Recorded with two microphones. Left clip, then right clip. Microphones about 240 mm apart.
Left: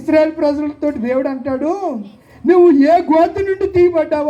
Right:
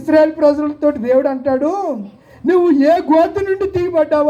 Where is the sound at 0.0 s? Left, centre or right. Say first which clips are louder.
Right 2 dB; right.